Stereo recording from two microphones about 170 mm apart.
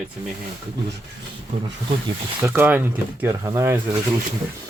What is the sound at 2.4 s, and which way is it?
Speech, 10° right (ahead or behind).